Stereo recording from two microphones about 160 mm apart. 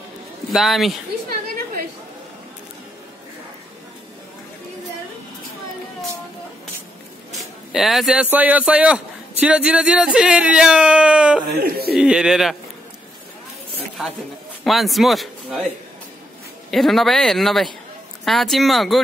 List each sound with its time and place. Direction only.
0.5 s a man's voice: centre (ahead or behind)
7.3 s a man's voice: centre (ahead or behind)
11.6 s speech: 75° right (ahead or behind)
12.0 s a man's voice: 5° right (ahead or behind)
14.6 s a man's voice: centre (ahead or behind)
16.7 s a man's voice: centre (ahead or behind)